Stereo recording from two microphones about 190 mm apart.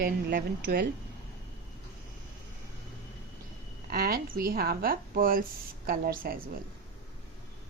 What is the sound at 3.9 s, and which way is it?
Speech, 55° right (ahead or behind).